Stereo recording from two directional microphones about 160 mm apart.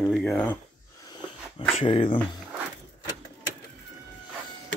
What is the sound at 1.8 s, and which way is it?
Speech, 35° left (ahead or behind).